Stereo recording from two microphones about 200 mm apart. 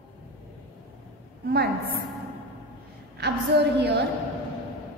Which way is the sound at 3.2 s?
55° right (ahead or behind).